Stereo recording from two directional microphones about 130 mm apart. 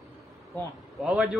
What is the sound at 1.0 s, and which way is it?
Speech, centre (ahead or behind).